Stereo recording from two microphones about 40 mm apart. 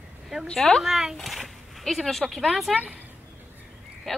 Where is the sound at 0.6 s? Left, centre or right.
Centre.